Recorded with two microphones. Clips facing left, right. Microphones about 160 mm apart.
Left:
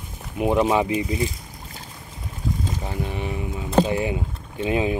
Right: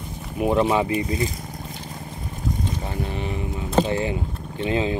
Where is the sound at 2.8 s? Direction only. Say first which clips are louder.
Even; 15° left (ahead or behind).